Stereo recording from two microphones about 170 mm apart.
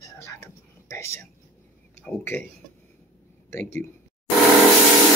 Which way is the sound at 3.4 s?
15° left (ahead or behind).